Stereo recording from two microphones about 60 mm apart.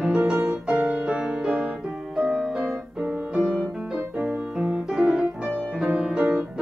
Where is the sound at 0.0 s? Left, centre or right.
Centre.